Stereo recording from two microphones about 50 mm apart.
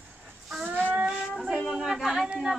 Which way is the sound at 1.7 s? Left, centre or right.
Centre.